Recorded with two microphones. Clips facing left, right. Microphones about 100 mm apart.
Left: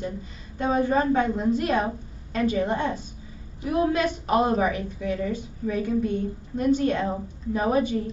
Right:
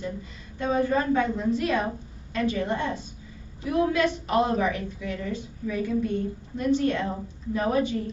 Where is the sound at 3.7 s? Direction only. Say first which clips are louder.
Left 1 dB; 30° left (ahead or behind).